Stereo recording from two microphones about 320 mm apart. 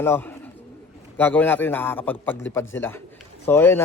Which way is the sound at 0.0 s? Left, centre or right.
Centre.